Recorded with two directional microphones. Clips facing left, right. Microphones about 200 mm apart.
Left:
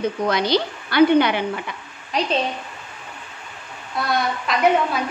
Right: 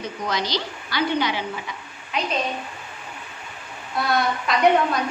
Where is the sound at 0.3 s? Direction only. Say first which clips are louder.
Left 4 dB; 55° left (ahead or behind).